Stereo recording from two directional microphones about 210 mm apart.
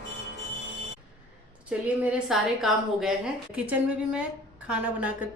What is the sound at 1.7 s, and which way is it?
A woman's voice, 5° right (ahead or behind).